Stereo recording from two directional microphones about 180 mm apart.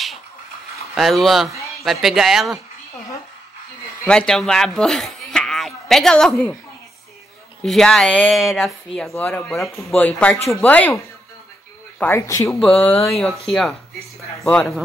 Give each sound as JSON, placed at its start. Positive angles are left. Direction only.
{"t": 0.9, "sound": "speech", "side_deg": 0}
{"t": 4.0, "sound": "speech", "side_deg": 5}
{"t": 7.6, "sound": "speech", "side_deg": 0}
{"t": 12.0, "sound": "speech", "side_deg": 15}
{"t": 12.5, "sound": "speech", "side_deg": 5}